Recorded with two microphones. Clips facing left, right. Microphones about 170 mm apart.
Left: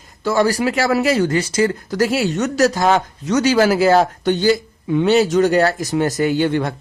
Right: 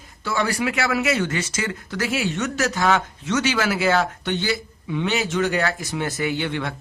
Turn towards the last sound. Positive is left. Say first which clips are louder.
# left 8 dB
turn(degrees=40)  # may be behind; listen again after turning